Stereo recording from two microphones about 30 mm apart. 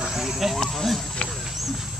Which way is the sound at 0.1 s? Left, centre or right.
Centre.